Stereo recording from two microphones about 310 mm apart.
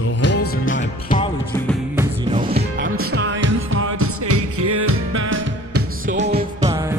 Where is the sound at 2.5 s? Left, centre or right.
Right.